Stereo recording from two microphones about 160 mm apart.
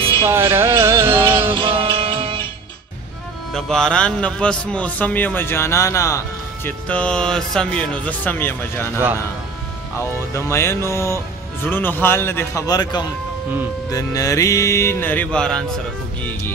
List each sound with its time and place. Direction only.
0.3 s music: 15° right (ahead or behind)
1.5 s music: 35° right (ahead or behind)
3.5 s a man's voice: 5° left (ahead or behind); by 6.7 s 20° left (ahead or behind)
6.9 s a man's voice: 5° left (ahead or behind)
10.3 s a man's voice: 15° left (ahead or behind)